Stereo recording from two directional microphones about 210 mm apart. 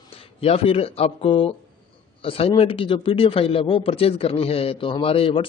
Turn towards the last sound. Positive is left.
turn(degrees=25)  # may be behind; listen again after turning